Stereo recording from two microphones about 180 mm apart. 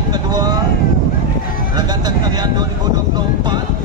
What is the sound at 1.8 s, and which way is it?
Speech, 20° right (ahead or behind).